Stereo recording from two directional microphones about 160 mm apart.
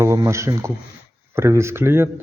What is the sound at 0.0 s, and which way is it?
Speech, 20° right (ahead or behind).